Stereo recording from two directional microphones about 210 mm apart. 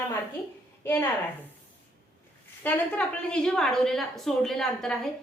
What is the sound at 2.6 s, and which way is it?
A woman's voice, 5° left (ahead or behind).